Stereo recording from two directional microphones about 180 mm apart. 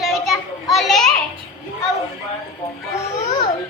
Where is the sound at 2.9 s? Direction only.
40° left (ahead or behind).